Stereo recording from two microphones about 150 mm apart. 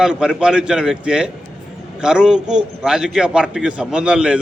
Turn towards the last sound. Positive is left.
turn(degrees=-5)  # may be behind; listen again after turning